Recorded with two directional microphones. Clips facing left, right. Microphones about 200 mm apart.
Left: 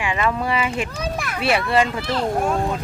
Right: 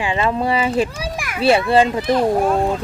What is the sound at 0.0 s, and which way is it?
Speech, 30° right (ahead or behind).